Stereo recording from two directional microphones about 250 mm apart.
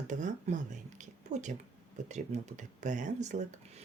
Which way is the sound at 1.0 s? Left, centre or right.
Right.